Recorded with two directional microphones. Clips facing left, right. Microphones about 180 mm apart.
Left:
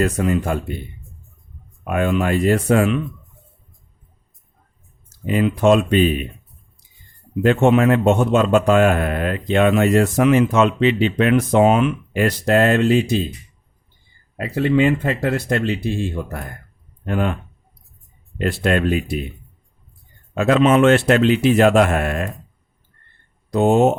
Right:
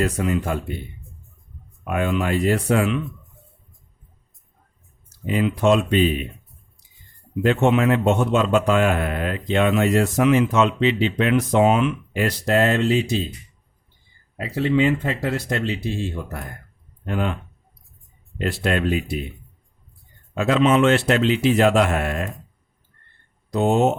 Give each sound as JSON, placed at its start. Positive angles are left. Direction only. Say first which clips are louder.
{"t": 0.0, "sound": "a man's voice", "louder": "left 3 dB", "side_deg": 45}
{"t": 1.8, "sound": "a man's voice", "louder": "left 3 dB", "side_deg": 50}
{"t": 5.0, "sound": "a man's voice", "louder": "left 3 dB", "side_deg": 50}
{"t": 7.4, "sound": "a man's voice", "louder": "left 3 dB", "side_deg": 50}
{"t": 14.3, "sound": "a man's voice", "louder": "left 3 dB", "side_deg": 55}
{"t": 20.3, "sound": "a man's voice", "louder": "left 3 dB", "side_deg": 50}
{"t": 23.5, "sound": "a man's voice", "louder": "left 4 dB", "side_deg": 50}